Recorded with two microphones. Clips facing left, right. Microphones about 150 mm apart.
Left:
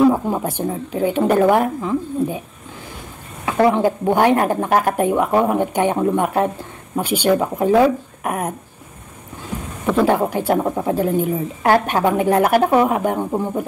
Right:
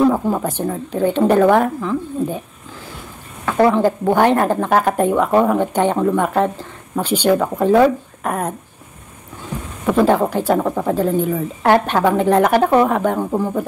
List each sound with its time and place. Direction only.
0.0 s speech: 10° left (ahead or behind)
3.6 s speech: 15° left (ahead or behind)
10.0 s speech: 10° left (ahead or behind)